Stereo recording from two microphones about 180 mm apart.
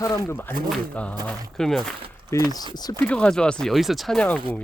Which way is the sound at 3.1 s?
5° left (ahead or behind).